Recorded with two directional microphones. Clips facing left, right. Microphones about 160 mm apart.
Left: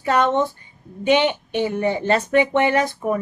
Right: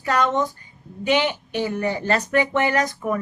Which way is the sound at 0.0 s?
25° left (ahead or behind).